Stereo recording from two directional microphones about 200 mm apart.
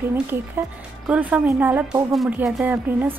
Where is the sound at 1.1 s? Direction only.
5° right (ahead or behind).